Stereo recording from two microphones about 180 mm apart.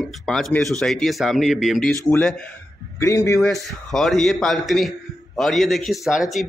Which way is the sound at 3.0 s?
15° left (ahead or behind).